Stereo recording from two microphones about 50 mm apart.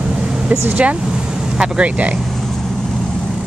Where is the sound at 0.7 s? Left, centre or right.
Right.